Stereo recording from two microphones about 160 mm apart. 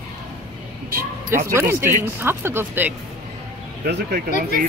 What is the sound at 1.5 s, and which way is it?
Speech, 15° right (ahead or behind).